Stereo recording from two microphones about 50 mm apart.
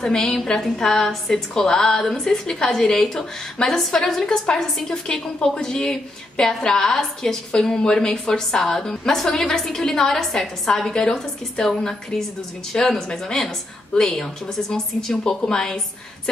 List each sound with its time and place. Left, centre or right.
0.0 s a woman's voice: centre
12.9 s a woman's voice: centre